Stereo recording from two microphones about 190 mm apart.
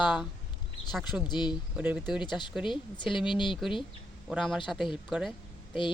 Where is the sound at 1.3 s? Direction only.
25° left (ahead or behind).